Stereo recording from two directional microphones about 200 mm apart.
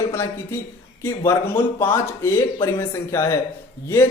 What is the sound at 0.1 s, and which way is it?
Speech, 15° left (ahead or behind).